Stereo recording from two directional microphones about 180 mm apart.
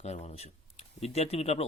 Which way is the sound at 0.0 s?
35° left (ahead or behind).